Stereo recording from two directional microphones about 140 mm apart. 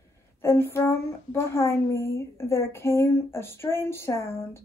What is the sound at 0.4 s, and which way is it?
A woman's voice, 15° left (ahead or behind).